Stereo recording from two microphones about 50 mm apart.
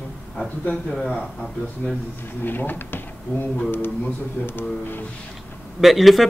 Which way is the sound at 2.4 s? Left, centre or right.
Left.